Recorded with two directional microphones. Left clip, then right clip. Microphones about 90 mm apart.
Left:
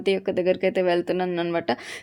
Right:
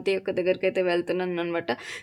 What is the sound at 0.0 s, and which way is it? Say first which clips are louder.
A woman's voice: left 3 dB; 30° left (ahead or behind).